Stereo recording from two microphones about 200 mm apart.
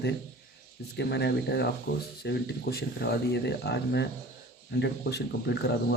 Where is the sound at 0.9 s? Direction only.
55° left (ahead or behind).